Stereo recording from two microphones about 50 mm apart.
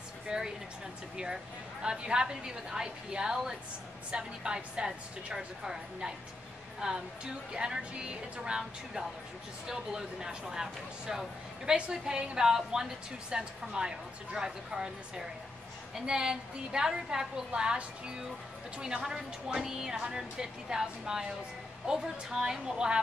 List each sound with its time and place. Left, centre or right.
0.3 s a woman's voice: centre